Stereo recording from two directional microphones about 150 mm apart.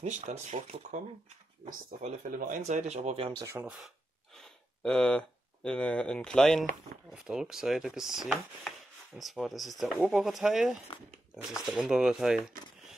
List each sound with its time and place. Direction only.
0.3 s speech: 45° right (ahead or behind)
1.7 s speech: 65° right (ahead or behind); by 3.3 s 45° right (ahead or behind)
3.4 s speech: 15° right (ahead or behind)
3.7 s speech: centre (ahead or behind)
10.9 s speech: 35° left (ahead or behind)
11.6 s speech: 5° right (ahead or behind)